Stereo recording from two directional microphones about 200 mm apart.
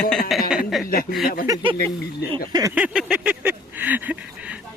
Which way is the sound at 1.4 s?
20° right (ahead or behind).